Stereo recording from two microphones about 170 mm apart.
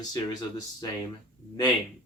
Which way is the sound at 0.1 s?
20° left (ahead or behind).